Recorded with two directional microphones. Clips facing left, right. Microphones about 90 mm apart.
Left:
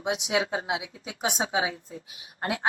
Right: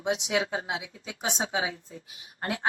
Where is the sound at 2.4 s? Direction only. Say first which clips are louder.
Left 2 dB; 25° left (ahead or behind).